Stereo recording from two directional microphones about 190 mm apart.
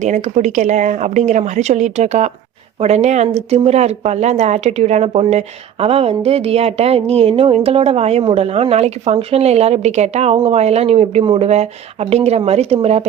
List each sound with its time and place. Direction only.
0.0 s speech: 40° right (ahead or behind)